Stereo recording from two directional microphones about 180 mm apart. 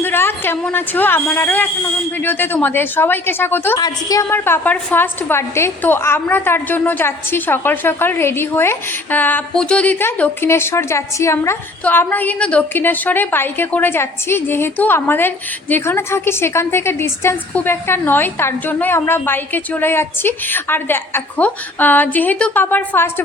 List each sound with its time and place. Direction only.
0.0 s a woman's voice: 10° left (ahead or behind)